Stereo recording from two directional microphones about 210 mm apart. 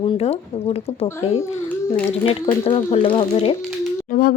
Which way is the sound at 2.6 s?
30° left (ahead or behind).